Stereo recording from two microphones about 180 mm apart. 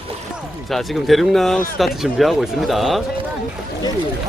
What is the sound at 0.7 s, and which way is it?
Speech, centre (ahead or behind).